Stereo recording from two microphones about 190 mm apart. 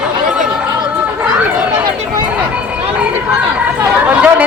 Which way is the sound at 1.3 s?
5° right (ahead or behind).